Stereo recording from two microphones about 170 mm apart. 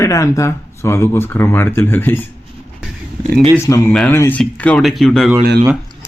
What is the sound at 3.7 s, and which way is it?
A man's voice, 15° left (ahead or behind).